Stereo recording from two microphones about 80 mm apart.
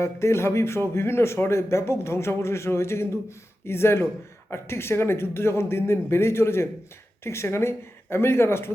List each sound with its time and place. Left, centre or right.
0.0 s speech: left